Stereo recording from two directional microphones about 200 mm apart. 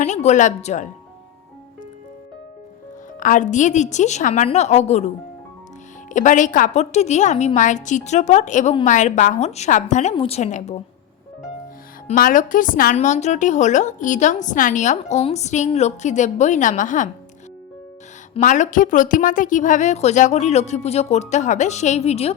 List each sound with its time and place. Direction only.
0.0 s a woman's voice: 35° left (ahead or behind)
3.2 s a woman's voice: 40° left (ahead or behind)
12.0 s a woman's voice: 40° left (ahead or behind)
18.3 s a woman's voice: 35° left (ahead or behind)